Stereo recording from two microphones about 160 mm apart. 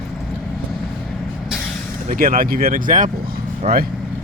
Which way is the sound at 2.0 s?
60° right (ahead or behind).